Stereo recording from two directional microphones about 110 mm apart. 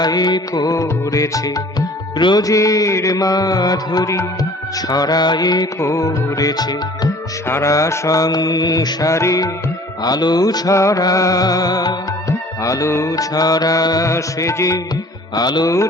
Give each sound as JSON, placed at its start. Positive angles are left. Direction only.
{"t": 0.0, "sound": "music", "side_deg": 35}
{"t": 7.4, "sound": "music", "side_deg": 25}